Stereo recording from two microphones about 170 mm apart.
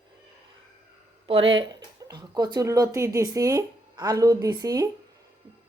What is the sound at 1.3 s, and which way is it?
Speech, 30° right (ahead or behind).